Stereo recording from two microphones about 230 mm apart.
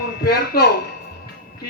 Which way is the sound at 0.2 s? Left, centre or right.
Left.